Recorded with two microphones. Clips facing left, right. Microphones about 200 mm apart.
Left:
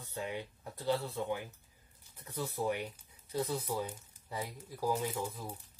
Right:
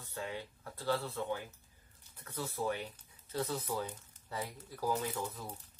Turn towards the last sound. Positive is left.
turn(degrees=10)  # may be behind; listen again after turning